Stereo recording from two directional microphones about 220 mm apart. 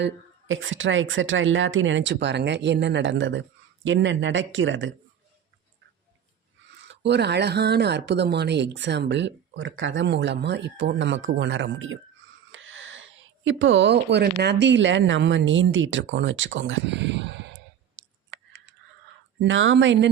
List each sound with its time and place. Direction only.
0.0 s speech: 60° right (ahead or behind)
6.8 s speech: 50° right (ahead or behind)
18.3 s computer keyboard: 60° right (ahead or behind)
19.4 s speech: 60° right (ahead or behind)